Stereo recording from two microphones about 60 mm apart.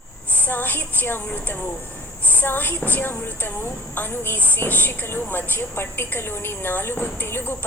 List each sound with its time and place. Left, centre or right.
0.3 s a woman's voice: left